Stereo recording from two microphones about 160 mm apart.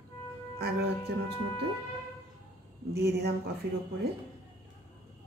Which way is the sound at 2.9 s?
80° right.